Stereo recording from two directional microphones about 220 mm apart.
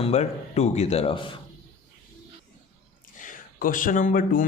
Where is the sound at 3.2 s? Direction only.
35° left (ahead or behind).